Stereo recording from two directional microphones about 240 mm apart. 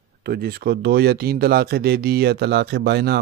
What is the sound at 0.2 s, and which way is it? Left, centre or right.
Speech, right.